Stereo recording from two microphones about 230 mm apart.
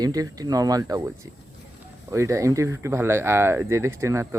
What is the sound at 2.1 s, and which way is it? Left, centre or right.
Speech, centre.